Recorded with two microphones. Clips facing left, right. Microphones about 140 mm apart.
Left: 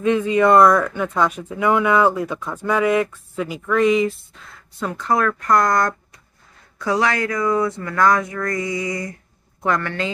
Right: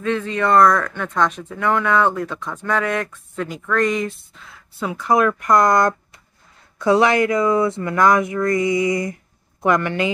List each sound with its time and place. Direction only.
0.0 s a woman's voice: 15° left (ahead or behind); by 10.1 s 15° right (ahead or behind)